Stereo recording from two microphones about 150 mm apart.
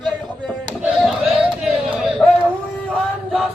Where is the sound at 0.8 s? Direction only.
5° right (ahead or behind).